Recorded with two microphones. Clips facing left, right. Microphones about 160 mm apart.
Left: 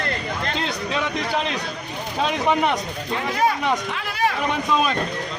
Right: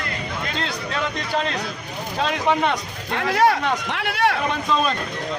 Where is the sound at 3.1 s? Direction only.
75° right (ahead or behind).